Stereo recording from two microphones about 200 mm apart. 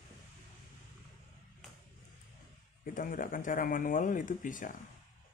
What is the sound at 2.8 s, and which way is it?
Speech, 45° left (ahead or behind).